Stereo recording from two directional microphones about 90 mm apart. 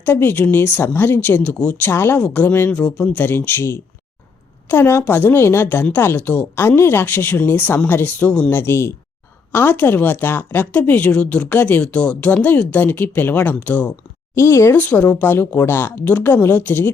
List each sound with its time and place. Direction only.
0.0 s a woman's voice: 25° left (ahead or behind)
1.9 s a woman's voice: 25° left (ahead or behind)
14.3 s a woman's voice: 30° left (ahead or behind)